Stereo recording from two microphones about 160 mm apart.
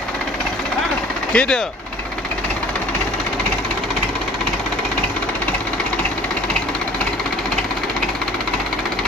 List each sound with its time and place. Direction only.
1.3 s speech: 5° left (ahead or behind)